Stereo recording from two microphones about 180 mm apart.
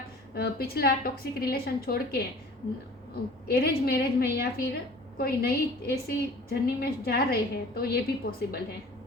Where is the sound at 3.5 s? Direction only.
60° left (ahead or behind).